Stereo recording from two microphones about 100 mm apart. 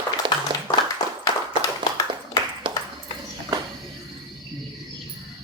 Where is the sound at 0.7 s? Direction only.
15° left (ahead or behind).